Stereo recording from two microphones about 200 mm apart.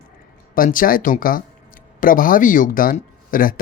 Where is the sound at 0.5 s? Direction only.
45° left (ahead or behind).